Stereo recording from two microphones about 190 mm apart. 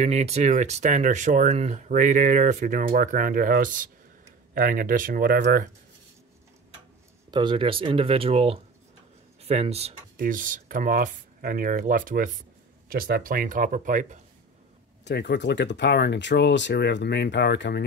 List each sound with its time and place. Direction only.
0.0 s speech: 35° right (ahead or behind)
7.2 s speech: 25° right (ahead or behind); by 14.2 s 40° right (ahead or behind)
15.0 s speech: 65° left (ahead or behind)